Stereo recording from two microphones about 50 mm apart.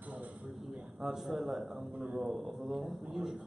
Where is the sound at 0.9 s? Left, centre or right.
Centre.